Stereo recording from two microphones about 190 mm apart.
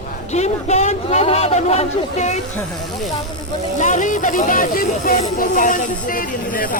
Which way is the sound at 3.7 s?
40° left (ahead or behind).